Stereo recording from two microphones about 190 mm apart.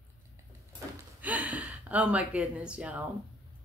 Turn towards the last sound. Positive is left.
turn(degrees=-5)  # may be behind; listen again after turning